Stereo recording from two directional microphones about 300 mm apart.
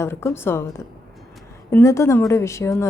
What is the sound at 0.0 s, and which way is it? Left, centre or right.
Speech, centre.